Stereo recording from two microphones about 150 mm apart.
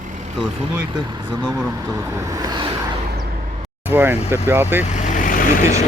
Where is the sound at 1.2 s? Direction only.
30° right (ahead or behind).